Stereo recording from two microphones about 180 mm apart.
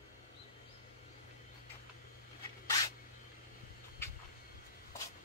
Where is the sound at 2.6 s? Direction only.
20° left (ahead or behind).